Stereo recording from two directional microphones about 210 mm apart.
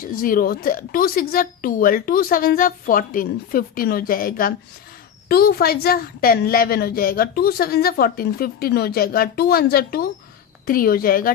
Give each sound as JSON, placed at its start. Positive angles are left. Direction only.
{"t": 0.0, "sound": "a woman's voice", "side_deg": 40}